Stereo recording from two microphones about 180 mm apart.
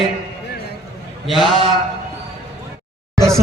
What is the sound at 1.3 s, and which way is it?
Speech, centre (ahead or behind).